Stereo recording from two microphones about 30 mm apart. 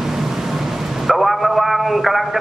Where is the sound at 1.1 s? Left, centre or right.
Centre.